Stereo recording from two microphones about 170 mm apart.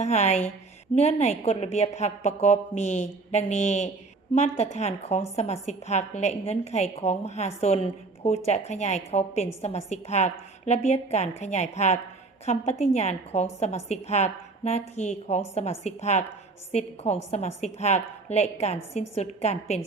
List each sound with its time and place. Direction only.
0.0 s a woman's voice: 40° left (ahead or behind)